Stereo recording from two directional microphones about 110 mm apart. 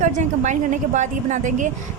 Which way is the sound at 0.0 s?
90° right.